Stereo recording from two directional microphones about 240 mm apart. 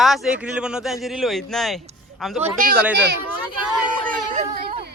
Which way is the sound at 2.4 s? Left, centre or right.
Right.